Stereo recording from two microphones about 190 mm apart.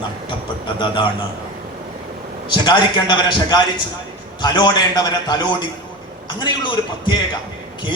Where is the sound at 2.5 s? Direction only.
25° left (ahead or behind).